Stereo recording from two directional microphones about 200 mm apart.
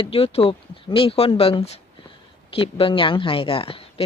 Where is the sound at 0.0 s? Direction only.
30° left (ahead or behind).